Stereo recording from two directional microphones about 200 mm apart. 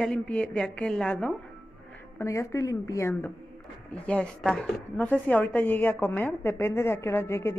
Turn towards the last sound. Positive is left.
turn(degrees=10)  # may be behind; listen again after turning